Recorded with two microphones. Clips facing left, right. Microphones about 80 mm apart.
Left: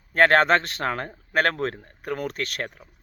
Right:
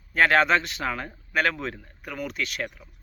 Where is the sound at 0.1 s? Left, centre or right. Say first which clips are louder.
Left 2 dB; left.